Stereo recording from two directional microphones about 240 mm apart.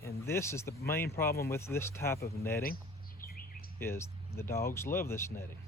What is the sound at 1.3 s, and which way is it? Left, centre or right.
Speech, left.